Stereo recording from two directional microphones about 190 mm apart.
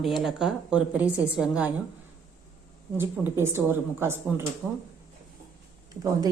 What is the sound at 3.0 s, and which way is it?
A woman's voice, 15° right (ahead or behind).